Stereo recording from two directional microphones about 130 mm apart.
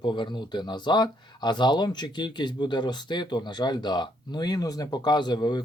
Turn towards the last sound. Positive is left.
turn(degrees=35)  # may be behind; listen again after turning